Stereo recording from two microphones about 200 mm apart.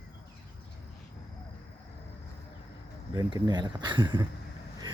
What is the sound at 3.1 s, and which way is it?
Speech, 20° right (ahead or behind).